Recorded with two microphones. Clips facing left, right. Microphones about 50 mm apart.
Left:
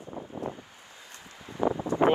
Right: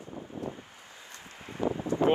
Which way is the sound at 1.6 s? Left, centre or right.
Left.